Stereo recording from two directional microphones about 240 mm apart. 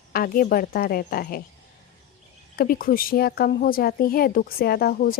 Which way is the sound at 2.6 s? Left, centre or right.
Left.